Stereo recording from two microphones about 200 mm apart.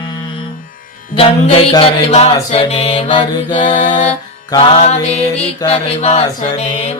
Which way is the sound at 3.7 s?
35° left (ahead or behind).